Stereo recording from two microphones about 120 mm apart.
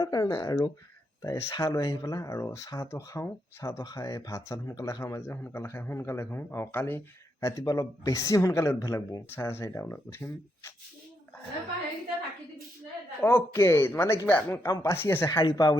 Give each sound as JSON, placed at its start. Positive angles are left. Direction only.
{"t": 0.0, "sound": "speech", "side_deg": 35}
{"t": 7.4, "sound": "speech", "side_deg": 30}
{"t": 13.2, "sound": "speech", "side_deg": 20}
{"t": 15.4, "sound": "speech", "side_deg": 35}